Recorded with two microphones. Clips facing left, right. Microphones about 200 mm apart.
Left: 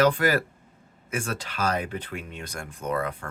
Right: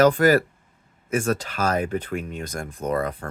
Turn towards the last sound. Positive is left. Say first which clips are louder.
# right 4 dB
turn(degrees=-40)  # may be behind; listen again after turning